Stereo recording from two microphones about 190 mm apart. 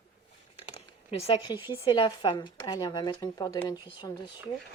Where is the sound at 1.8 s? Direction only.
25° left (ahead or behind).